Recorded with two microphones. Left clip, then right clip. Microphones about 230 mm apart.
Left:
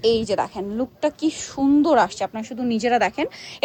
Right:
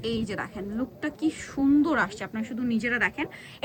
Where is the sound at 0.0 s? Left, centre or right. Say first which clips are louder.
Left 12 dB; centre.